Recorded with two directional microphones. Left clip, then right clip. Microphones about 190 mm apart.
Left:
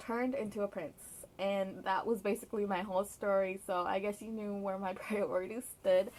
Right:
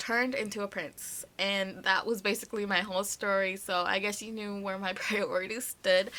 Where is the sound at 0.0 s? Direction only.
15° right (ahead or behind).